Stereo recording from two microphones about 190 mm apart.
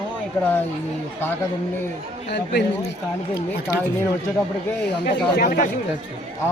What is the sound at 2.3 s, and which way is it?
Speech, 60° left (ahead or behind).